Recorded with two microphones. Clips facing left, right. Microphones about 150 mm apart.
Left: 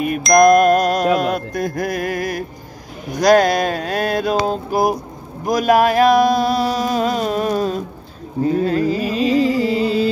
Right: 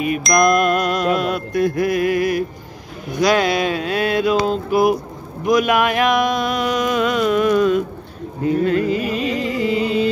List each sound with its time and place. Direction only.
0.3 s music: 45° left (ahead or behind)
3.1 s a sound: 40° left (ahead or behind)
8.6 s music: 35° left (ahead or behind)